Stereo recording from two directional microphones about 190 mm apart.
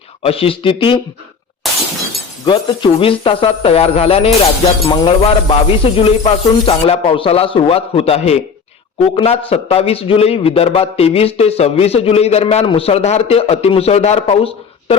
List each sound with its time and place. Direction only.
0.2 s speech: 30° left (ahead or behind)
1.6 s shatter: centre (ahead or behind)
2.5 s a man's voice: 25° left (ahead or behind)